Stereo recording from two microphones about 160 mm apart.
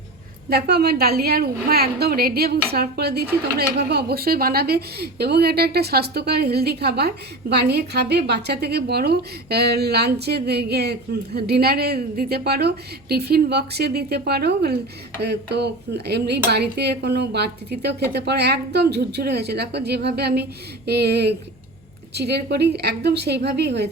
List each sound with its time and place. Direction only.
0.5 s a woman's voice: 90° right